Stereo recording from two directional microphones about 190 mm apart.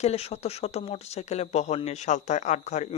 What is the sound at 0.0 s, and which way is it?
Speech, 35° left (ahead or behind).